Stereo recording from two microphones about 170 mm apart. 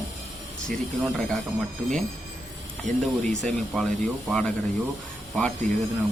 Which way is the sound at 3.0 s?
Centre (ahead or behind).